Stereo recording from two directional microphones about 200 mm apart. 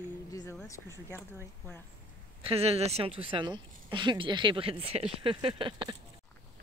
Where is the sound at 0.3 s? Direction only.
15° left (ahead or behind).